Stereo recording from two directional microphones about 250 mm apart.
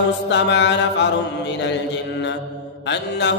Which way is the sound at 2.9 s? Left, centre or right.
Left.